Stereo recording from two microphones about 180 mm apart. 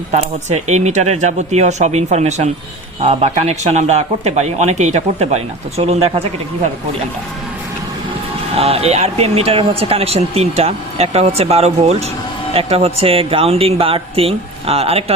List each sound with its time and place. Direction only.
0.1 s speech: 40° right (ahead or behind)
8.5 s speech: 35° right (ahead or behind)